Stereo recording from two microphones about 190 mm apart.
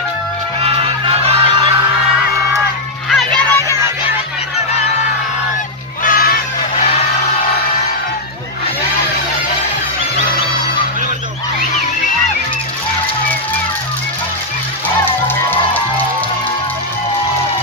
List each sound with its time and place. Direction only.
0.6 s music: 30° right (ahead or behind)
3.1 s music: centre (ahead or behind)
6.0 s music: 50° left (ahead or behind)